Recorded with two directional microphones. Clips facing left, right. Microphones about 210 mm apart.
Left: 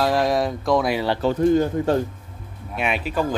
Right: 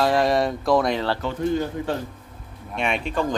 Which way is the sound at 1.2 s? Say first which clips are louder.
Left 6 dB; 45° left (ahead or behind).